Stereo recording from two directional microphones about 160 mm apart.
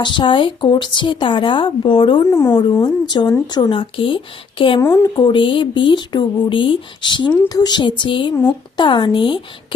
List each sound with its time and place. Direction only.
0.0 s speech: 30° left (ahead or behind)